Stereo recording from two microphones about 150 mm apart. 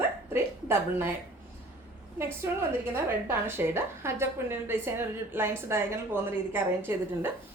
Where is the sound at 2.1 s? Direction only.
15° right (ahead or behind).